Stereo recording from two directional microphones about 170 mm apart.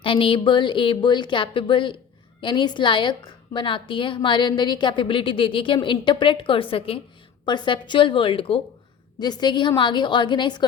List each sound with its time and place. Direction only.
0.0 s a woman's voice: 30° left (ahead or behind)